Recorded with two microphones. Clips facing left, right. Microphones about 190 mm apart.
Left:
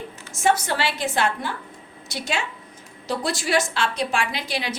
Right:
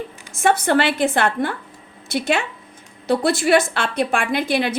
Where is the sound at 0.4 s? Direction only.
55° right (ahead or behind).